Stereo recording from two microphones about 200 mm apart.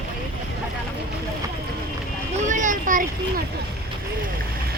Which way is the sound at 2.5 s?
40° right (ahead or behind).